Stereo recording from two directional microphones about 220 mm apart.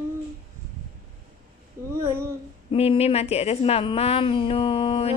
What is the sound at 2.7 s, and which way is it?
A woman's voice, 25° left (ahead or behind).